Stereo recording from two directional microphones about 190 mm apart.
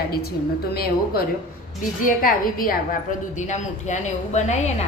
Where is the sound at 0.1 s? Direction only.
55° left (ahead or behind).